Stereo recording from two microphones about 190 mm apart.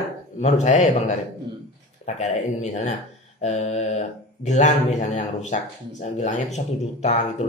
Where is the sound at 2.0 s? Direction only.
35° left (ahead or behind).